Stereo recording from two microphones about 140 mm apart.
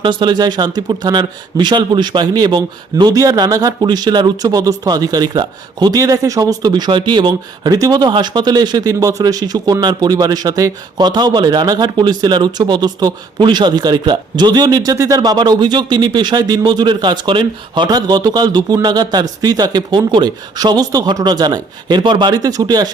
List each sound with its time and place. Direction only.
0.0 s speech: 35° right (ahead or behind)